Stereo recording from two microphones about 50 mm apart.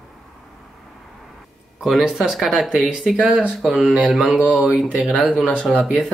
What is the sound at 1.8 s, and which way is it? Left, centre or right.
Speech, centre.